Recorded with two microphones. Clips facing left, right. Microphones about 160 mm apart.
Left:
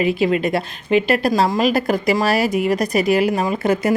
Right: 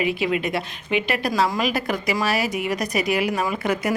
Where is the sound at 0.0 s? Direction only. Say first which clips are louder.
Left 5 dB; 35° left (ahead or behind).